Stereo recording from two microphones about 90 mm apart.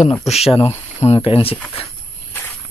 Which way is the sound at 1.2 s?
90° left.